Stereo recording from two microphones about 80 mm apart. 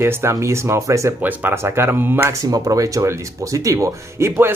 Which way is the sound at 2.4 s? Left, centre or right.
Right.